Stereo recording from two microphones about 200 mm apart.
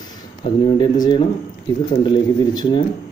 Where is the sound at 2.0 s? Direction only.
25° left (ahead or behind).